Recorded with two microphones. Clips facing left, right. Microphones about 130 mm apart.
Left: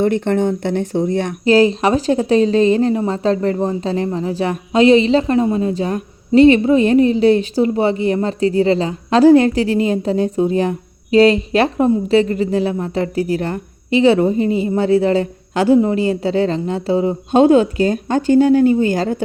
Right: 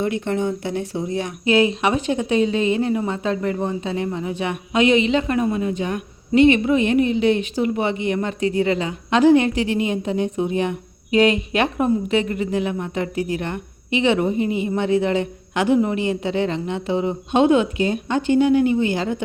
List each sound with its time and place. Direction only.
0.0 s speech: 55° left (ahead or behind)
1.5 s a woman's voice: 35° left (ahead or behind)